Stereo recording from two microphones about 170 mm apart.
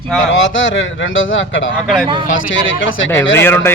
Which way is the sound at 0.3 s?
90° left.